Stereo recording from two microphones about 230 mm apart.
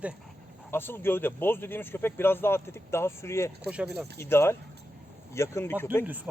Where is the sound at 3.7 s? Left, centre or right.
Centre.